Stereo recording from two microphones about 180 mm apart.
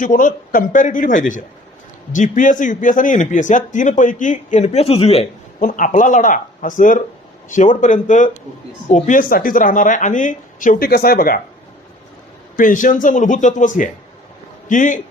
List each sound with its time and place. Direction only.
0.0 s speech: 45° left (ahead or behind)
5.5 s speech: 50° left (ahead or behind)
12.5 s speech: 50° left (ahead or behind)